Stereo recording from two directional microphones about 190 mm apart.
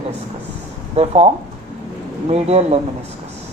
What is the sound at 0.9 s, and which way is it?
Speech, 30° right (ahead or behind).